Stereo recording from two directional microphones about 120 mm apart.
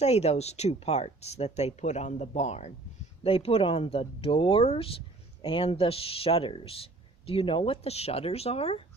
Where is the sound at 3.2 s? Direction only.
50° left (ahead or behind).